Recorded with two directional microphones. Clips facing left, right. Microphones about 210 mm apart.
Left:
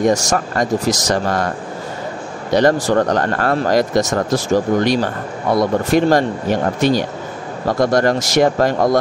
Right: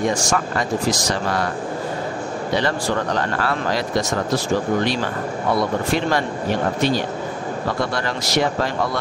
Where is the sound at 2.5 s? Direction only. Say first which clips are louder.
Left 9 dB; 45° left (ahead or behind).